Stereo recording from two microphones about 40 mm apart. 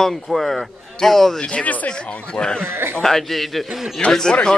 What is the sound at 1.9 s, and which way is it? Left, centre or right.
Speech, left.